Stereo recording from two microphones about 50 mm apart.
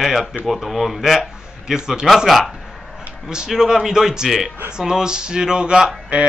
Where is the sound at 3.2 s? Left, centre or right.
Centre.